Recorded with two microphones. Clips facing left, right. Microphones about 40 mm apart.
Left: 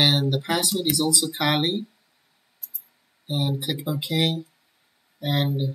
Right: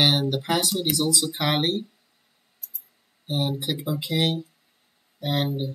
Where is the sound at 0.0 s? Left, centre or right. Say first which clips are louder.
Even; centre.